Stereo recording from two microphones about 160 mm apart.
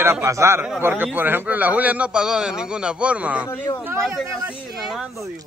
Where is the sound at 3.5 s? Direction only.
20° left (ahead or behind).